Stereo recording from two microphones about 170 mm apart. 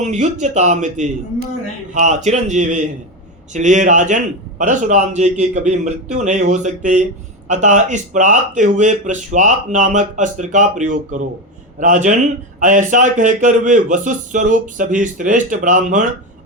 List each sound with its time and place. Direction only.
0.0 s speech: 45° right (ahead or behind)